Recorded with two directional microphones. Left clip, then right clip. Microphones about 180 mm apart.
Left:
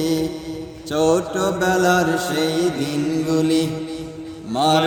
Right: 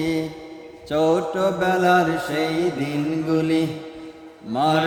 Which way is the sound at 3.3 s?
5° right (ahead or behind).